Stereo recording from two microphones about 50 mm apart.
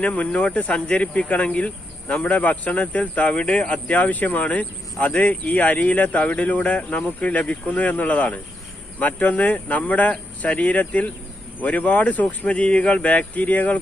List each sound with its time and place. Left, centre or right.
0.0 s speech: left